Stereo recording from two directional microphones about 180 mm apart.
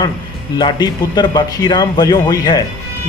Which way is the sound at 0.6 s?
25° left (ahead or behind).